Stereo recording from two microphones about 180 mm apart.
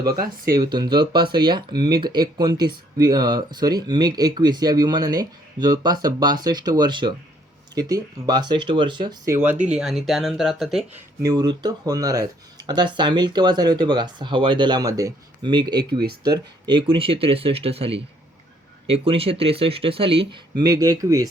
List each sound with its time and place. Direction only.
0.5 s speech: 20° right (ahead or behind)
9.6 s speech: 5° right (ahead or behind)
11.3 s speech: 20° right (ahead or behind)